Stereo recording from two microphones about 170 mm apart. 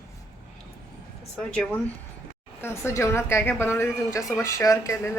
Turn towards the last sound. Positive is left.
turn(degrees=20)  # may be behind; listen again after turning